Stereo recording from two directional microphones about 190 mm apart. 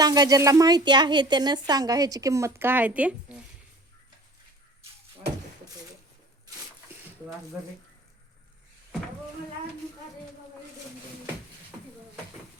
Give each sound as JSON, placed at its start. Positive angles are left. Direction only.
{"t": 0.0, "sound": "speech", "side_deg": -20}